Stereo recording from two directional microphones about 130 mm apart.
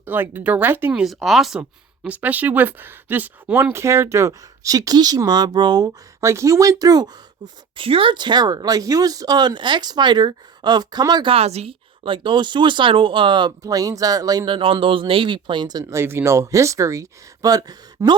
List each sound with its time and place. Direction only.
0.0 s speech: 15° right (ahead or behind)
1.0 s speech: centre (ahead or behind)
2.0 s speech: 10° right (ahead or behind); by 7.9 s 30° right (ahead or behind)
7.9 s speech: 45° right (ahead or behind)